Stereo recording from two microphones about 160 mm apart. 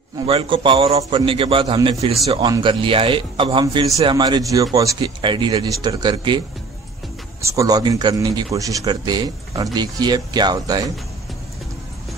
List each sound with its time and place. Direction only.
0.3 s a man's voice: 35° right (ahead or behind)
3.6 s speech: 20° right (ahead or behind)
7.4 s speech: 20° right (ahead or behind)